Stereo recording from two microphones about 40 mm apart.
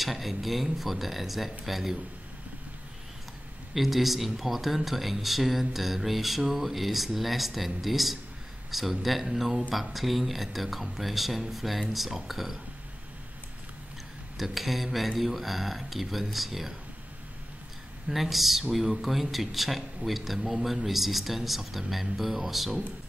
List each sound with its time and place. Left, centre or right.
0.0 s speech: centre
3.7 s speech: centre
14.3 s speech: centre
18.0 s speech: centre